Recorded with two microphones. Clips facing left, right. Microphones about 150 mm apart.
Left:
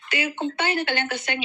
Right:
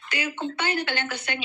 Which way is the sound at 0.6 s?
20° left (ahead or behind).